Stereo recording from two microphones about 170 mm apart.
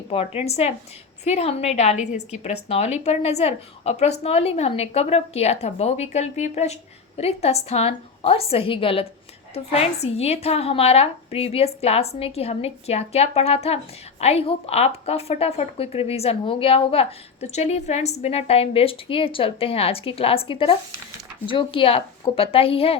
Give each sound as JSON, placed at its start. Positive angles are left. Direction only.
{"t": 0.1, "sound": "a woman's voice", "side_deg": 35}